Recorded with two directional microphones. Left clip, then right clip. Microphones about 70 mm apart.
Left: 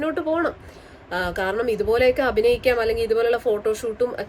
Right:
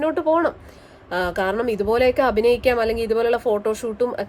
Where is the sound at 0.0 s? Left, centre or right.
Right.